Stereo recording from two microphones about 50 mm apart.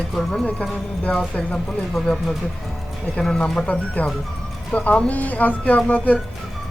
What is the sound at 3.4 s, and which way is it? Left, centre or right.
Speech, centre.